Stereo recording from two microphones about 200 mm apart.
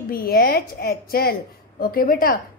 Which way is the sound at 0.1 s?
50° left (ahead or behind).